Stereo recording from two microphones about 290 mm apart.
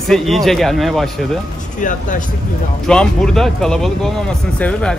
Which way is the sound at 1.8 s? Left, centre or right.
Left.